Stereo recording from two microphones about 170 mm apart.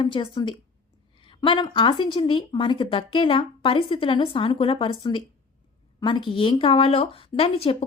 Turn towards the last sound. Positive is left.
turn(degrees=35)  # may be behind; listen again after turning